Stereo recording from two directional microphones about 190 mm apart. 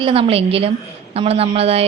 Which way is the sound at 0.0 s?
30° right (ahead or behind).